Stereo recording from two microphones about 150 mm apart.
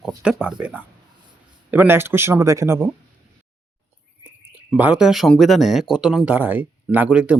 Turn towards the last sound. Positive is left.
turn(degrees=-10)  # may be behind; listen again after turning